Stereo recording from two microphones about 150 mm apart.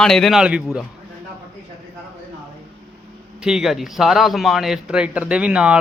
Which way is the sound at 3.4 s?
5° right (ahead or behind).